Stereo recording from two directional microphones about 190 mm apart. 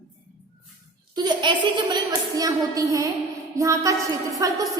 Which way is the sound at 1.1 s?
25° right (ahead or behind).